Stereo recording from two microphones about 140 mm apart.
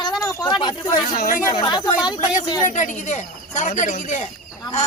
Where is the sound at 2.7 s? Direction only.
60° left (ahead or behind).